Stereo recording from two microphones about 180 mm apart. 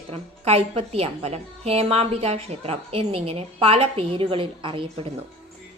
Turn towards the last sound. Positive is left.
turn(degrees=-30)  # may be behind; listen again after turning